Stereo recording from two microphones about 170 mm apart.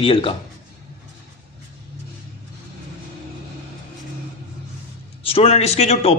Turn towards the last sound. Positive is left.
turn(degrees=40)  # may be behind; listen again after turning